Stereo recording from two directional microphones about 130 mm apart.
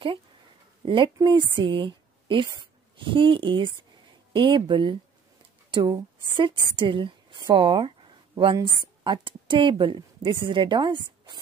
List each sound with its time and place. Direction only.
0.8 s a woman's voice: 40° right (ahead or behind)